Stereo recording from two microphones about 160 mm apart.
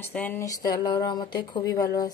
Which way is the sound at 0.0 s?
10° left (ahead or behind).